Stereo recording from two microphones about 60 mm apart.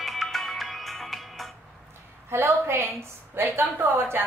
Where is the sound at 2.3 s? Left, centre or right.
Right.